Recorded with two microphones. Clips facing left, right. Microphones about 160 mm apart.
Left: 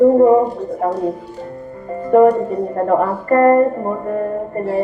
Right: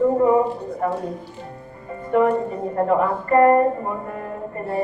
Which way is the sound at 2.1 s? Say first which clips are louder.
Left 7 dB; 45° left (ahead or behind).